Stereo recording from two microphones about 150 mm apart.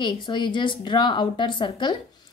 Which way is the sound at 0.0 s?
30° left (ahead or behind).